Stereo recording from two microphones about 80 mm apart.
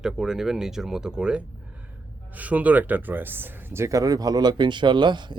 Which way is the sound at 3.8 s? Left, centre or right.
Right.